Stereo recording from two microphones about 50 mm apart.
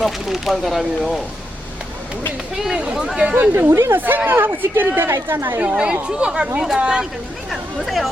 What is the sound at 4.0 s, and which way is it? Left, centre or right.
Speech, right.